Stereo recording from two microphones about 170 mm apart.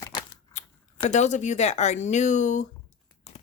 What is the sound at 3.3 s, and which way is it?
Crumpling, 40° left (ahead or behind).